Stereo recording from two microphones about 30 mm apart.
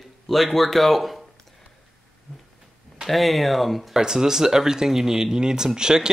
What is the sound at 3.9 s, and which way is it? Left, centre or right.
Speech, centre.